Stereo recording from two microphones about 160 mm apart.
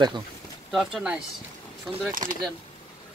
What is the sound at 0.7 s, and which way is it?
Speech, 5° right (ahead or behind).